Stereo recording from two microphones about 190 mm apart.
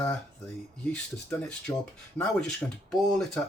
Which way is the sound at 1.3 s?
5° left (ahead or behind).